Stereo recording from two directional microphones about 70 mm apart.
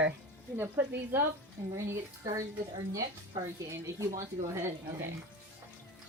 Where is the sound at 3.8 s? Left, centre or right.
Right.